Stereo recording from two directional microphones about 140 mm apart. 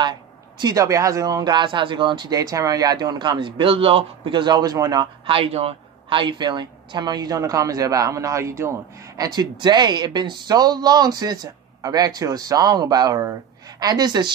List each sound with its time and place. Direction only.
0.6 s speech: 25° right (ahead or behind)
5.2 s a woman's voice: 40° right (ahead or behind)